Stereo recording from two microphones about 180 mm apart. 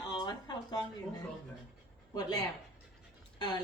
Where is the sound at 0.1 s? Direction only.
20° left (ahead or behind).